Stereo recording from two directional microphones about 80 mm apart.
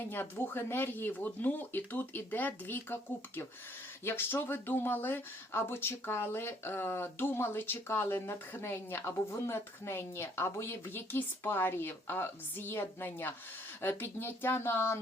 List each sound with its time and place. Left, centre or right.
0.1 s speech: left